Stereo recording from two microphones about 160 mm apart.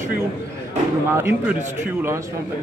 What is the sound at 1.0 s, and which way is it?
Speech, 15° right (ahead or behind).